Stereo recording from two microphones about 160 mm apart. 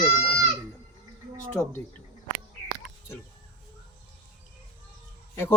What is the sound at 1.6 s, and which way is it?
Speech, 5° left (ahead or behind).